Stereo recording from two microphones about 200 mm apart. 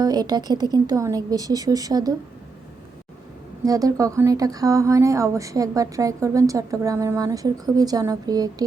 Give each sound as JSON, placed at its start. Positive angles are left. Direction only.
{"t": 0.0, "sound": "a woman's voice", "side_deg": -20}
{"t": 3.6, "sound": "speech", "side_deg": -15}